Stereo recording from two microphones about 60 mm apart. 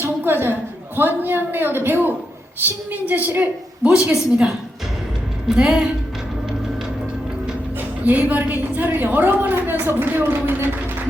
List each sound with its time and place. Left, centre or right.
0.0 s a sound: right
0.9 s a woman's voice: right
3.8 s a woman's voice: centre
5.5 s a woman's voice: centre
8.1 s a woman's voice: right